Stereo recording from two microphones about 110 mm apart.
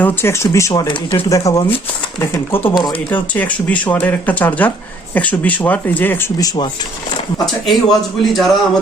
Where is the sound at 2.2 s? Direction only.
20° left (ahead or behind).